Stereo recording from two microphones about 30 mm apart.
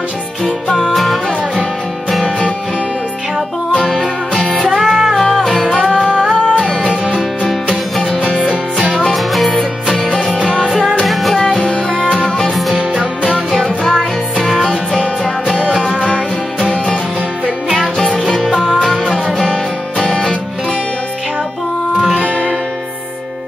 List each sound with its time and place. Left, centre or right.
0.9 s music: centre
4.6 s music: centre
4.8 s music: centre
6.3 s music: left
8.4 s music: right
9.1 s music: centre
9.6 s music: centre
11.6 s music: left
13.5 s music: centre
14.5 s music: centre
18.8 s music: centre
20.1 s music: left